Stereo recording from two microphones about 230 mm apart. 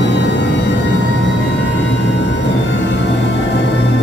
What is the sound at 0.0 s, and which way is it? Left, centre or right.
Scary music, left.